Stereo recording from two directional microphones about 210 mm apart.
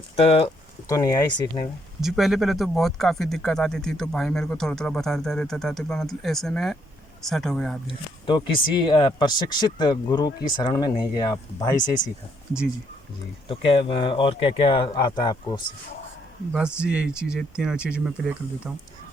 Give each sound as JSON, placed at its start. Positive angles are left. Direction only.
{"t": 0.2, "sound": "speech", "side_deg": 25}
{"t": 0.9, "sound": "speech", "side_deg": 15}
{"t": 2.0, "sound": "speech", "side_deg": 0}
{"t": 7.9, "sound": "speech", "side_deg": 25}
{"t": 13.5, "sound": "speech", "side_deg": 25}
{"t": 16.5, "sound": "speech", "side_deg": -5}